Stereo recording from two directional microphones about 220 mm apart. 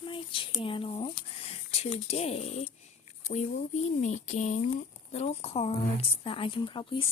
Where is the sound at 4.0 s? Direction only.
35° left (ahead or behind).